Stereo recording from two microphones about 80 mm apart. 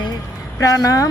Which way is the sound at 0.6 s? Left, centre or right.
Left.